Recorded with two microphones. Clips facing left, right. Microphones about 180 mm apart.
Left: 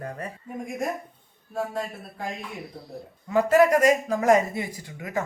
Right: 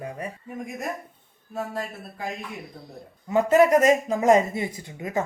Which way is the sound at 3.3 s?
20° right (ahead or behind).